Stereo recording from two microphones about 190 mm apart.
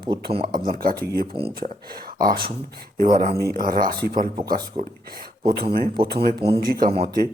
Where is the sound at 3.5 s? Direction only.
50° right (ahead or behind).